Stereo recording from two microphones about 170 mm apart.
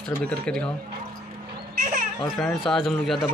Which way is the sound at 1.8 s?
50° right (ahead or behind).